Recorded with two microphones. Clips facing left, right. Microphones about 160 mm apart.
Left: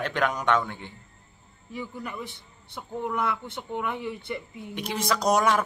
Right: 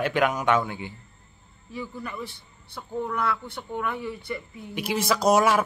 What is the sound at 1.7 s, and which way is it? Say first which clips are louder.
Speech: right 1 dB; 20° left (ahead or behind).